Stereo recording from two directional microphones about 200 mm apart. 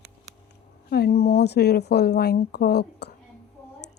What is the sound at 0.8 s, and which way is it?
A woman's voice, 55° left (ahead or behind).